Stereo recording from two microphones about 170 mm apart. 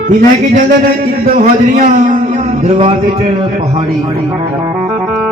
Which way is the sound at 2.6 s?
35° right (ahead or behind).